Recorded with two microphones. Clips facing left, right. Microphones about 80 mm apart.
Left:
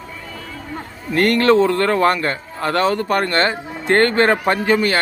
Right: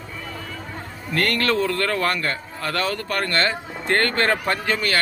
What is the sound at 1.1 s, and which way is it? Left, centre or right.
Speech, left.